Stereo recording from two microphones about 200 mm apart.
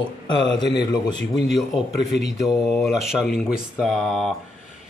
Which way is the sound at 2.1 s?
Centre (ahead or behind).